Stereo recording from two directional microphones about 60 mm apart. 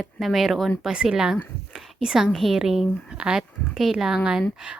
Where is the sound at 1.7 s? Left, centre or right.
Centre.